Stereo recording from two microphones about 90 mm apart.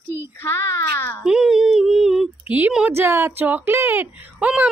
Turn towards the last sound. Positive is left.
turn(degrees=-15)  # may be behind; listen again after turning